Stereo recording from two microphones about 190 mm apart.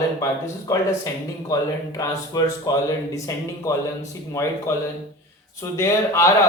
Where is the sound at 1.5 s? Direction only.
15° left (ahead or behind).